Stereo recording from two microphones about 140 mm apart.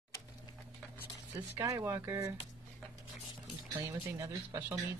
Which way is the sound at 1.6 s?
20° right (ahead or behind).